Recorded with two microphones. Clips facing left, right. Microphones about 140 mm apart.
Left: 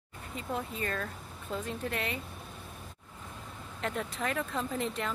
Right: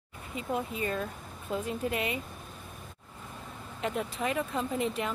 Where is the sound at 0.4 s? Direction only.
10° right (ahead or behind).